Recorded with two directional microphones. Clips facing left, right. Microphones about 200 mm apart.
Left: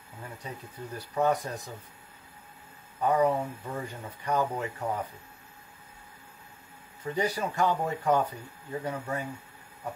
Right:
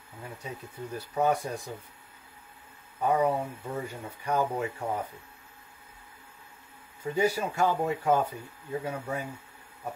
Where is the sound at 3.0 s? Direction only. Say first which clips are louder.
Left 1 dB; 10° right (ahead or behind).